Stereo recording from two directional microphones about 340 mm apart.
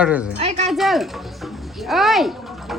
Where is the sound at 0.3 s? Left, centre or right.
Centre.